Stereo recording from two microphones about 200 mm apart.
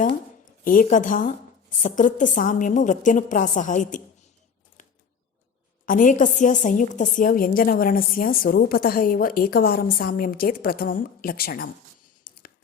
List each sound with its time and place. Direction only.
0.6 s a woman's voice: 45° left (ahead or behind)
4.8 s a sound: 40° left (ahead or behind)
5.8 s a woman's voice: 40° left (ahead or behind)